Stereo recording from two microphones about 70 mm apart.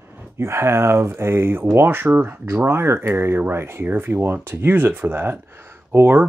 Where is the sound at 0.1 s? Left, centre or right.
Right.